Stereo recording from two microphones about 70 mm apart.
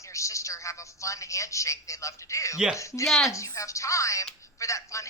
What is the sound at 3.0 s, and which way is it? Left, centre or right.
Speech, centre.